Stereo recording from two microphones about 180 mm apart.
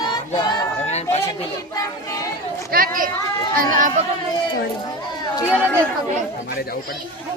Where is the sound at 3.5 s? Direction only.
45° right (ahead or behind).